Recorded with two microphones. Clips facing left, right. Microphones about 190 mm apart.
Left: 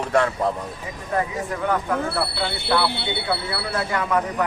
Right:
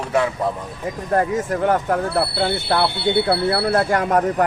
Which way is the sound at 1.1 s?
45° right (ahead or behind).